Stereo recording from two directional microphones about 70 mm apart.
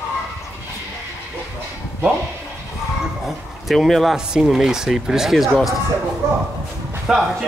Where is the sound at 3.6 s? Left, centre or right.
Centre.